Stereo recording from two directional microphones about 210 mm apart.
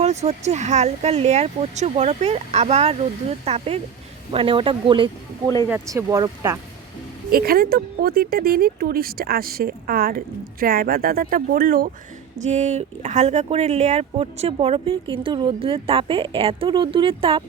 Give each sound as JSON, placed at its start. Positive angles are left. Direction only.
{"t": 0.0, "sound": "speech", "side_deg": -30}
{"t": 5.6, "sound": "speech", "side_deg": -10}
{"t": 7.3, "sound": "speech", "side_deg": -45}